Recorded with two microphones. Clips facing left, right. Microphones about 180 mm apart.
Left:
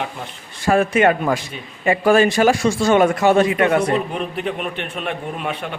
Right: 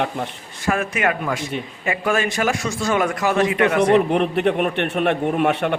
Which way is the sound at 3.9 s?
65° right (ahead or behind).